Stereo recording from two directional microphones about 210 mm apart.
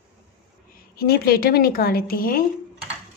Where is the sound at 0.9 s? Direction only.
50° left (ahead or behind).